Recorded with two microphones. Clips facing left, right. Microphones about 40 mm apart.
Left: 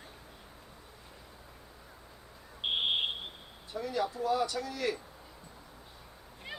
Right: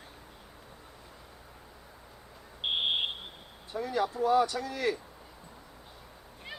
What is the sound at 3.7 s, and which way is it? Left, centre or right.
Speech, right.